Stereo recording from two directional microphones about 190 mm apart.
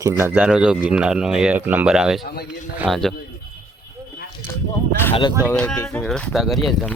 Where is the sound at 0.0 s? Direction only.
15° right (ahead or behind).